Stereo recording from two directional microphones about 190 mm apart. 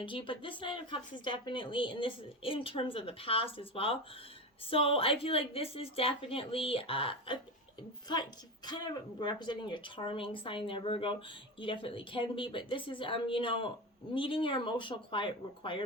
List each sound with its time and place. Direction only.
0.0 s a woman's voice: 25° left (ahead or behind)